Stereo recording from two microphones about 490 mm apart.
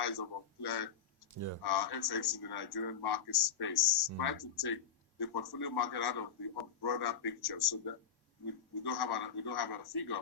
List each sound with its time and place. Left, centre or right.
0.0 s a man's voice: left
1.3 s speech: right
1.6 s a man's voice: left